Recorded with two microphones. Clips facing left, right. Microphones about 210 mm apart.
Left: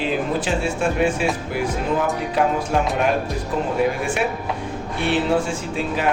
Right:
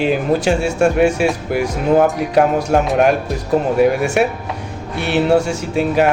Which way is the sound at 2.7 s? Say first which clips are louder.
Right 7 dB; 50° right (ahead or behind).